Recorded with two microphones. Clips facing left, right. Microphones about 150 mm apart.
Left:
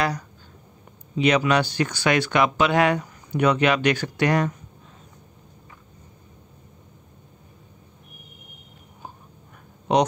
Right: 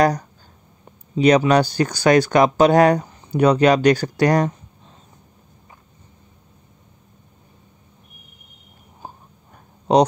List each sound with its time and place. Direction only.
0.0 s speech: 45° right (ahead or behind)
9.9 s speech: 35° right (ahead or behind)